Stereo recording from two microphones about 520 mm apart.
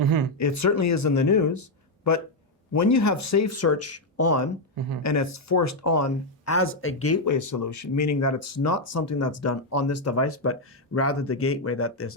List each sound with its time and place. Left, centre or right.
0.0 s speech: right
0.3 s speech: left